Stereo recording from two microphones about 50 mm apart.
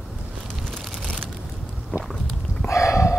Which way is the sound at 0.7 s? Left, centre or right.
Centre.